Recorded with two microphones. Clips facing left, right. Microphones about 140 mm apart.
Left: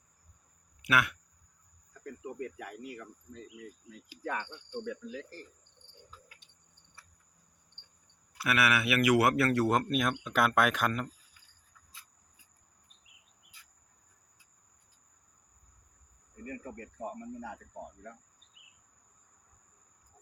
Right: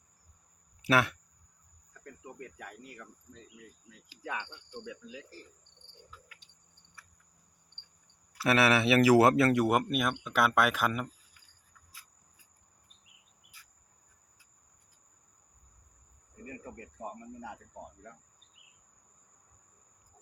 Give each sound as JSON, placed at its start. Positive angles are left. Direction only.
{"t": 0.8, "sound": "speech", "side_deg": -30}
{"t": 2.6, "sound": "speech", "side_deg": 5}
{"t": 4.2, "sound": "speech", "side_deg": 45}
{"t": 6.1, "sound": "a sound", "side_deg": 30}
{"t": 8.4, "sound": "speech", "side_deg": -30}
{"t": 11.9, "sound": "cricket", "side_deg": 25}